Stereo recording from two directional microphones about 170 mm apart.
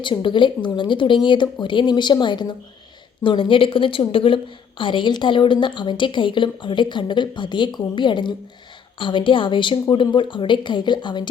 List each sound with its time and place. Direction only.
0.0 s a woman's voice: 30° left (ahead or behind)